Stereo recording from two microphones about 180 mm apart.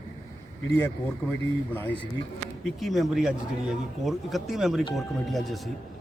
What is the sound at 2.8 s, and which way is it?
Speech, centre (ahead or behind).